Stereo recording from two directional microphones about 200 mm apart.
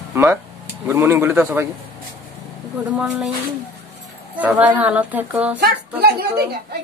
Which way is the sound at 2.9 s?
5° right (ahead or behind).